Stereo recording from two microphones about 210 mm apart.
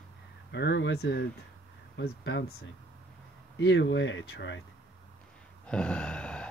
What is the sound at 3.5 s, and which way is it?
Speech, 60° left (ahead or behind).